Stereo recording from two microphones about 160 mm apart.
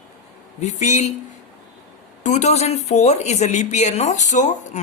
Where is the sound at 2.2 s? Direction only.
45° left (ahead or behind).